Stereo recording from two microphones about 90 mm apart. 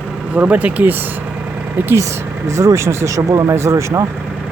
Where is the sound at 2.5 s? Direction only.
35° right (ahead or behind).